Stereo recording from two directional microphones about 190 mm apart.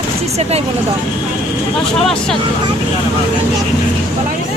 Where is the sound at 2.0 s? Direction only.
Centre (ahead or behind).